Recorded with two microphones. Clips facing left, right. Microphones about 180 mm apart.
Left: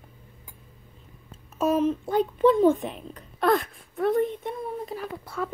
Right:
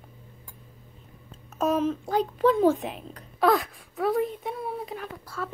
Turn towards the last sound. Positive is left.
turn(degrees=0)  # may be behind; listen again after turning